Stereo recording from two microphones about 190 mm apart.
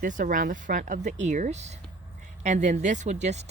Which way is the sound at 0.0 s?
45° right (ahead or behind).